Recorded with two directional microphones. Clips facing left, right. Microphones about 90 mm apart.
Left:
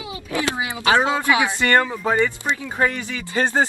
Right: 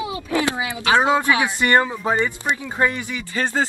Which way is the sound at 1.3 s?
20° left (ahead or behind).